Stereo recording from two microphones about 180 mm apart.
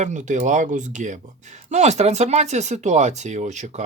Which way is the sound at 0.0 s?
40° right (ahead or behind).